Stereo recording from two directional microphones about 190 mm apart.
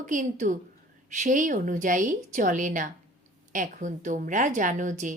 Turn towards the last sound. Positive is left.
turn(degrees=-40)  # may be behind; listen again after turning